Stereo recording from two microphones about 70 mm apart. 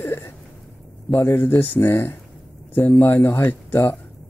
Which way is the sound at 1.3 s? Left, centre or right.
Left.